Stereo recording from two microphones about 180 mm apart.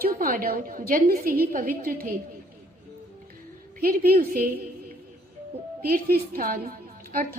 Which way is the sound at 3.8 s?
55° right (ahead or behind).